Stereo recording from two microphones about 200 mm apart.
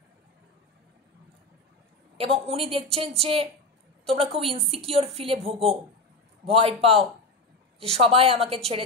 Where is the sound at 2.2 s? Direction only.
30° right (ahead or behind).